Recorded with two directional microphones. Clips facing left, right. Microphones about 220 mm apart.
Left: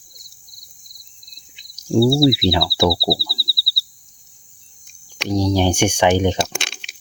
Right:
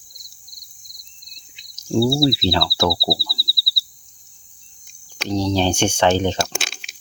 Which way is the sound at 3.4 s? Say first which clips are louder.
Left 1 dB; 20° right (ahead or behind).